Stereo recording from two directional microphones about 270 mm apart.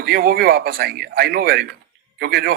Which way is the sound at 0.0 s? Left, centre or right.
Right.